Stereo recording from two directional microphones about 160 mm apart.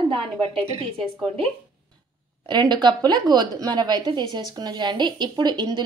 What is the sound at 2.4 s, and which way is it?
A woman's voice, 30° right (ahead or behind).